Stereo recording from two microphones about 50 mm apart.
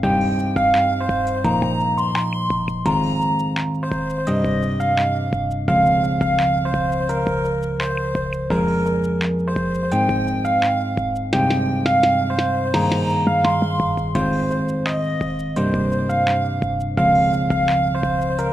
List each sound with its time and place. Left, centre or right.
5.8 s music: left
6.1 s music: centre
8.6 s music: right
11.3 s music: centre
17.1 s music: centre